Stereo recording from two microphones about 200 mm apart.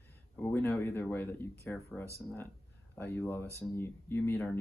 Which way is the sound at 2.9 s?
10° left (ahead or behind).